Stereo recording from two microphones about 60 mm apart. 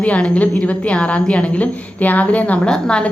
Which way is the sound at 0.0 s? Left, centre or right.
Left.